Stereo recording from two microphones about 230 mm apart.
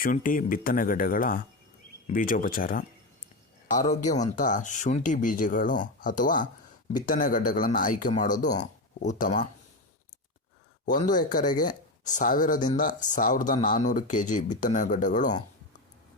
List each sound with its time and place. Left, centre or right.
0.0 s speech: left
10.8 s speech: left